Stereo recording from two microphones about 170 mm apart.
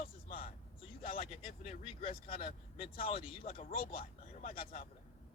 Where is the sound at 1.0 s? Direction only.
35° left (ahead or behind).